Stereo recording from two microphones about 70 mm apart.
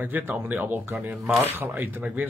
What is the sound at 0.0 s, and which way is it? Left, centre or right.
Speech, right.